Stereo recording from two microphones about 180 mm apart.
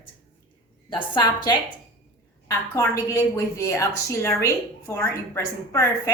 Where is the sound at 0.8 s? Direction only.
25° left (ahead or behind).